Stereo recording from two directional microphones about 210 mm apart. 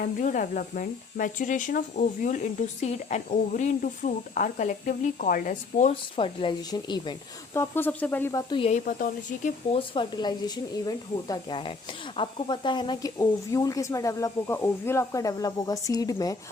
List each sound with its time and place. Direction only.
0.0 s speech: 40° left (ahead or behind)
8.9 s speech: 40° left (ahead or behind)
9.7 s speech: 25° left (ahead or behind)